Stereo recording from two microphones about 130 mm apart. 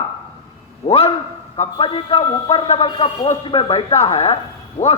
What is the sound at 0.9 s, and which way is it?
A man's voice, 50° left (ahead or behind).